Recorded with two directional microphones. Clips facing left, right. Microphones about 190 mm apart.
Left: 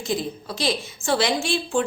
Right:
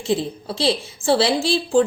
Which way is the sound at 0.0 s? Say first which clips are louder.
Right 4 dB; 30° right (ahead or behind).